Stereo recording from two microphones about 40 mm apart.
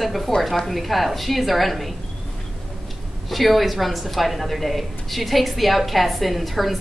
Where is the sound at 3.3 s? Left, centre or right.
Centre.